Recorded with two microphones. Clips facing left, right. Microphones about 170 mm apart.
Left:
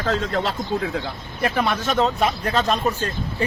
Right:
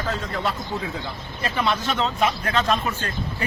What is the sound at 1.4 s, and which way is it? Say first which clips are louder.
Speech: left 2 dB; 55° left (ahead or behind).